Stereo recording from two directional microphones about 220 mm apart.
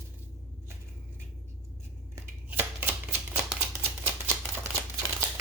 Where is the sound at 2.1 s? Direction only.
10° right (ahead or behind).